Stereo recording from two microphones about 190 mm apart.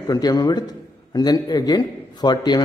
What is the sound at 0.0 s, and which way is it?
A man's voice, 20° left (ahead or behind).